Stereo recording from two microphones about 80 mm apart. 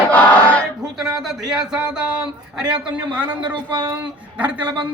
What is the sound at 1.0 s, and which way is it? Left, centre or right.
Speech, centre.